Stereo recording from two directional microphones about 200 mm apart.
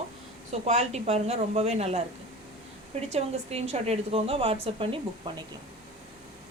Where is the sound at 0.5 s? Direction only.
30° right (ahead or behind).